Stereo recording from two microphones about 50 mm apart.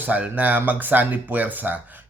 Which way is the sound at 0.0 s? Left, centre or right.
Right.